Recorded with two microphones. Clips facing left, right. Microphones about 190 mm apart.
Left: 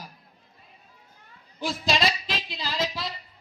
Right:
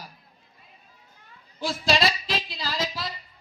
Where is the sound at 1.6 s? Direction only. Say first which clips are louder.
Right 2 dB; 20° left (ahead or behind).